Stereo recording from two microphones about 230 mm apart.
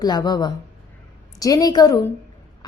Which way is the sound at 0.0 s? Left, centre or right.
Centre.